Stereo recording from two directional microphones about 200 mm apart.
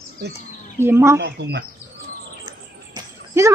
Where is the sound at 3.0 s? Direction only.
15° right (ahead or behind).